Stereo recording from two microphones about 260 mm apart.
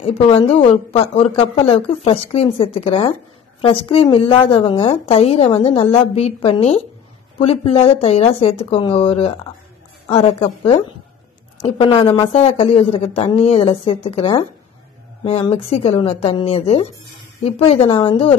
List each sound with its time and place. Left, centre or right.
0.0 s a woman's voice: left